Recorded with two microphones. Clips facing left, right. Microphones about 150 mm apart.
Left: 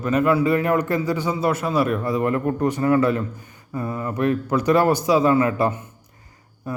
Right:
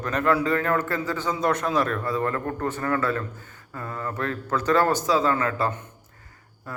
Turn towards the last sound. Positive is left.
turn(degrees=15)  # may be behind; listen again after turning